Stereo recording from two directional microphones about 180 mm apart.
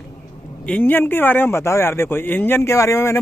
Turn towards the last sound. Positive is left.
turn(degrees=15)  # may be behind; listen again after turning